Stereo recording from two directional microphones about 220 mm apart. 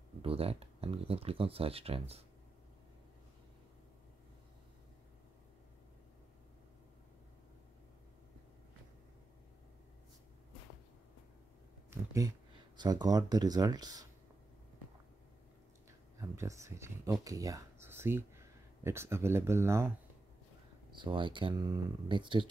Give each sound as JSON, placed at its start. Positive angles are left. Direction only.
{"t": 0.2, "sound": "speech", "side_deg": -25}
{"t": 12.1, "sound": "speech", "side_deg": -15}
{"t": 16.2, "sound": "speech", "side_deg": -15}
{"t": 20.9, "sound": "speech", "side_deg": -20}